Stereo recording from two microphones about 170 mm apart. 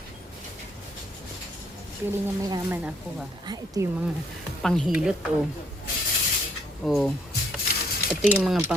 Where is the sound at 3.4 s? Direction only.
25° right (ahead or behind).